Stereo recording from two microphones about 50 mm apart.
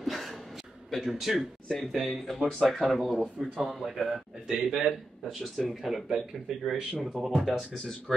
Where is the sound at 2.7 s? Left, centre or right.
Centre.